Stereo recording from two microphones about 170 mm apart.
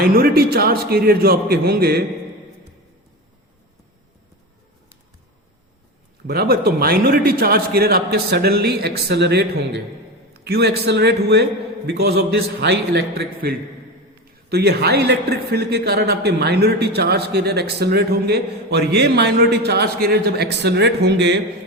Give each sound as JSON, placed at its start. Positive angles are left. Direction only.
{"t": 0.0, "sound": "a man's voice", "side_deg": -65}
{"t": 6.2, "sound": "a man's voice", "side_deg": -70}
{"t": 9.0, "sound": "speech", "side_deg": -85}
{"t": 10.4, "sound": "a man's voice", "side_deg": -75}
{"t": 14.5, "sound": "a man's voice", "side_deg": -70}